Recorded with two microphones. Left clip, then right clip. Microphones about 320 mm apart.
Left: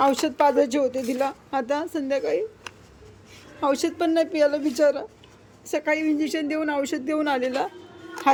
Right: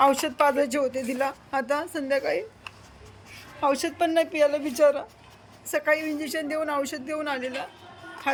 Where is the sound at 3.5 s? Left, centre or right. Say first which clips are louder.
Left 1 dB; centre.